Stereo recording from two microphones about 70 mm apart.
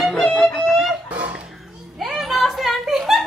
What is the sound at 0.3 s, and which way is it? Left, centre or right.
Music, centre.